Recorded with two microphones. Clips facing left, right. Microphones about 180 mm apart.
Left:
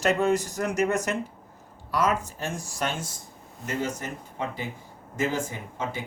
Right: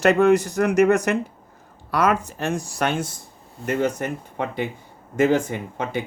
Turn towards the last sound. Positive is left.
turn(degrees=-65)  # may be behind; listen again after turning